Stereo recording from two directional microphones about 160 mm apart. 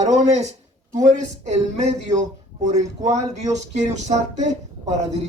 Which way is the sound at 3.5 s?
45° right (ahead or behind).